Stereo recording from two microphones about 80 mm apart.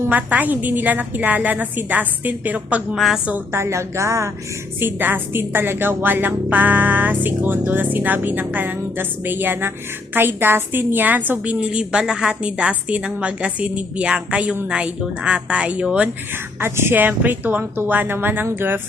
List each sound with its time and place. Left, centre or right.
0.1 s speech: centre
2.9 s a woman's voice: centre
3.5 s a woman's voice: right
4.8 s a woman's voice: right
16.6 s speech: right